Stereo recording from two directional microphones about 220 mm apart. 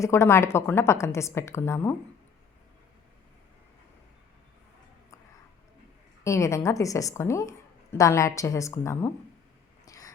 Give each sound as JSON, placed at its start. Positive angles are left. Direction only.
{"t": 0.0, "sound": "a woman's voice", "side_deg": 10}
{"t": 6.2, "sound": "a woman's voice", "side_deg": 15}
{"t": 9.8, "sound": "cat", "side_deg": 15}